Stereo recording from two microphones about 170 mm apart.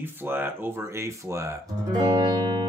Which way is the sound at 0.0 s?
10° right (ahead or behind).